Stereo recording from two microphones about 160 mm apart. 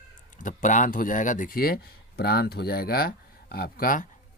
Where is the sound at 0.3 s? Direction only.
55° left (ahead or behind).